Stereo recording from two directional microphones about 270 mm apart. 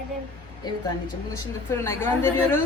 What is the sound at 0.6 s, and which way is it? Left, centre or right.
A woman's voice, centre.